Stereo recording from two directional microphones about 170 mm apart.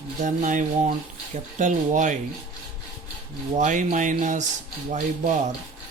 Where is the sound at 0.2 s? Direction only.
50° right (ahead or behind).